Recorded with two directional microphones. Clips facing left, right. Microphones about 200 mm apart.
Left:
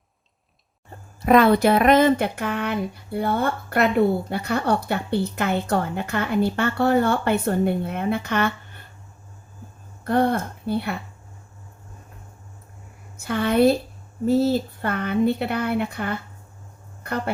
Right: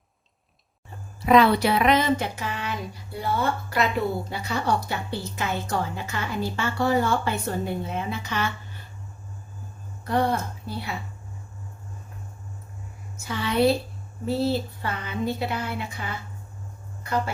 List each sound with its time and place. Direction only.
1.2 s speech: 50° left (ahead or behind)
10.0 s speech: 55° left (ahead or behind)
13.1 s a woman's voice: 55° left (ahead or behind)